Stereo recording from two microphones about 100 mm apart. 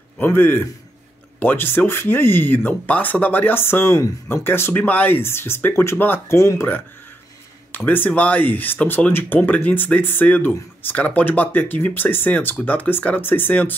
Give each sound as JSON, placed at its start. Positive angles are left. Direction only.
{"t": 0.2, "sound": "speech", "side_deg": 20}